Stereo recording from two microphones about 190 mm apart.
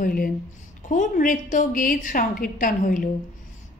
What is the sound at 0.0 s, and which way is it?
A woman's voice, 50° left (ahead or behind).